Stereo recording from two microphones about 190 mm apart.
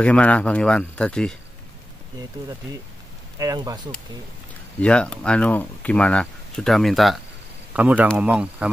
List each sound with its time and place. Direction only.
0.0 s speech: 5° left (ahead or behind)
3.3 s speech: 20° right (ahead or behind)
4.7 s speech: 5° left (ahead or behind)